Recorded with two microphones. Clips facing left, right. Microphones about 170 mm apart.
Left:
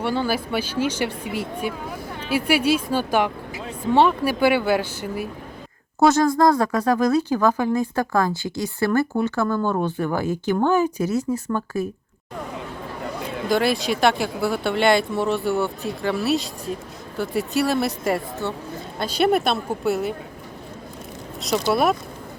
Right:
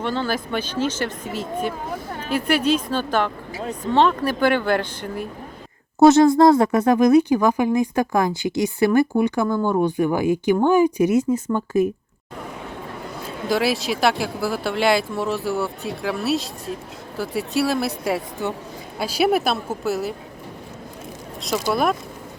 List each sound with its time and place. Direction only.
0.0 s speech: 10° left (ahead or behind)
6.0 s speech: 20° right (ahead or behind)
13.5 s speech: centre (ahead or behind)
18.4 s speech: 10° right (ahead or behind)
21.7 s speech: centre (ahead or behind)